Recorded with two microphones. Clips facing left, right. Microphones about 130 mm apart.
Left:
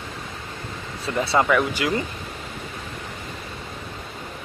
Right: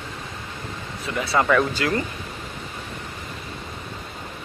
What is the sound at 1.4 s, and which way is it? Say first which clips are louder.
Speech: right 1 dB; 10° left (ahead or behind).